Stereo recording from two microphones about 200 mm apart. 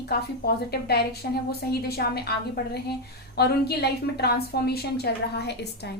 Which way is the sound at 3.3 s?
55° left (ahead or behind).